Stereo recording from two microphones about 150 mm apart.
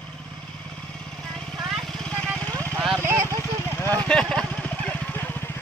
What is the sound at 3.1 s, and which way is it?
Vehicle, 20° right (ahead or behind).